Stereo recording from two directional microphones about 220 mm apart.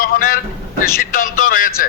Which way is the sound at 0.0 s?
40° left (ahead or behind).